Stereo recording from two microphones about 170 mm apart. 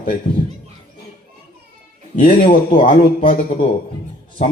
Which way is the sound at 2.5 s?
55° left (ahead or behind).